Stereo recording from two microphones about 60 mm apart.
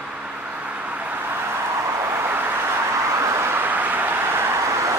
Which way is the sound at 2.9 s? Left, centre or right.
Right.